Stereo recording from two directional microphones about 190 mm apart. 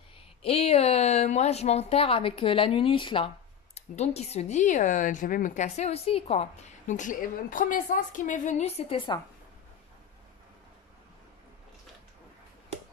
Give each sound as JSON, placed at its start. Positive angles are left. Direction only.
{"t": 0.4, "sound": "a woman's voice", "side_deg": 30}